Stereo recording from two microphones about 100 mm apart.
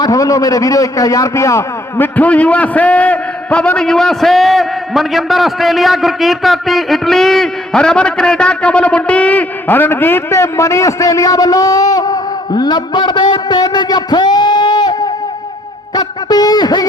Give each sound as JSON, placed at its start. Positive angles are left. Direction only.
{"t": 0.0, "sound": "a man's voice", "side_deg": 35}
{"t": 2.1, "sound": "a man's voice", "side_deg": 15}
{"t": 16.0, "sound": "a sound", "side_deg": 40}